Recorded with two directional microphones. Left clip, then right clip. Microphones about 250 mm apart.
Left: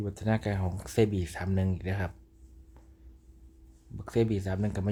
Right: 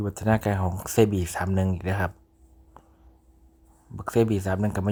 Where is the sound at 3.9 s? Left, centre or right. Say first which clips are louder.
Right 6 dB; centre.